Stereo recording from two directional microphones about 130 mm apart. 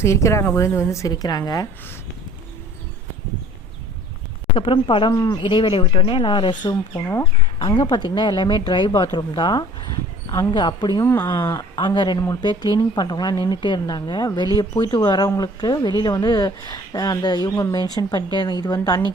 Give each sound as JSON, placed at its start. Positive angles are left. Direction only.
{"t": 0.0, "sound": "a woman's voice", "side_deg": 20}
{"t": 4.5, "sound": "speech", "side_deg": 40}
{"t": 5.1, "sound": "a woman's voice", "side_deg": 25}
{"t": 5.4, "sound": "speech", "side_deg": 40}
{"t": 11.0, "sound": "a woman's voice", "side_deg": 20}
{"t": 11.8, "sound": "a woman's voice", "side_deg": 35}